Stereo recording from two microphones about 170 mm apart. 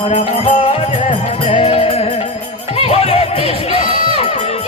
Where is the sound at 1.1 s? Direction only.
35° left (ahead or behind).